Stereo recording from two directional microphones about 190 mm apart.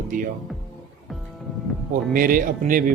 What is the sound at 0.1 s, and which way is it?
Speech, 45° right (ahead or behind).